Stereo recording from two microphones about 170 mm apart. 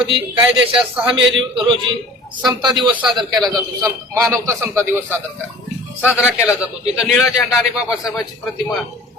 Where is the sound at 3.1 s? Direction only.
Centre (ahead or behind).